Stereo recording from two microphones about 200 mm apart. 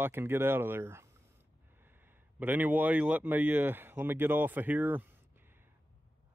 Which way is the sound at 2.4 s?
10° right (ahead or behind).